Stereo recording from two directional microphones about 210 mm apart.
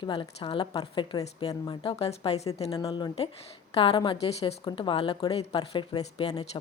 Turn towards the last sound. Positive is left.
turn(degrees=20)  # may be behind; listen again after turning